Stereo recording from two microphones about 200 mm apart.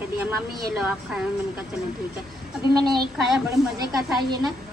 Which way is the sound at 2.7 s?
20° right (ahead or behind).